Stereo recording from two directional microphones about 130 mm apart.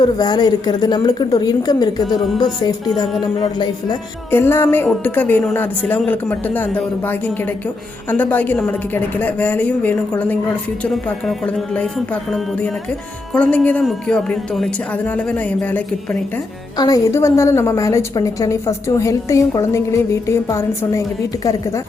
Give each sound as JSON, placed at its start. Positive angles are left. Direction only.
{"t": 0.0, "sound": "a woman's voice", "side_deg": 30}
{"t": 4.3, "sound": "a woman's voice", "side_deg": 15}
{"t": 16.7, "sound": "a woman's voice", "side_deg": 30}